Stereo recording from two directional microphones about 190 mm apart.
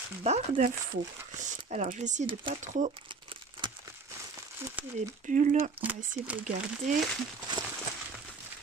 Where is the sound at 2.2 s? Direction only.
25° right (ahead or behind).